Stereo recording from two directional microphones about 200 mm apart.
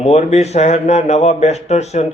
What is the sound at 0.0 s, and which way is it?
A man's voice, 35° left (ahead or behind).